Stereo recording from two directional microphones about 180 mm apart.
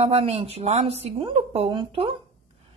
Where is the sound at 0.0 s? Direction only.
35° right (ahead or behind).